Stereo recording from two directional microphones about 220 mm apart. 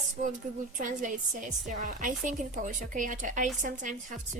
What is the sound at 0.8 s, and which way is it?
Speech, 35° right (ahead or behind).